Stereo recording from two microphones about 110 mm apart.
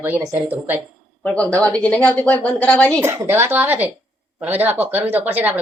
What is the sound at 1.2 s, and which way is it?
Speech, 10° left (ahead or behind).